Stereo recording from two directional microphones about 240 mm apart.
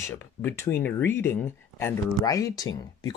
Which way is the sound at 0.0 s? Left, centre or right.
Centre.